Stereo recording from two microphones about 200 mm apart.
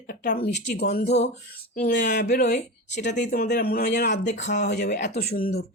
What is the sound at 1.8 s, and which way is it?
Speech, 50° left (ahead or behind).